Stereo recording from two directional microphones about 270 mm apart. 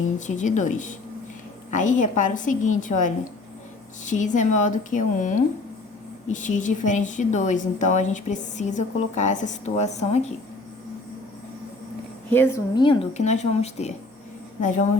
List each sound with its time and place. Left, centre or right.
0.3 s speech: left
12.3 s speech: centre; by 14.8 s left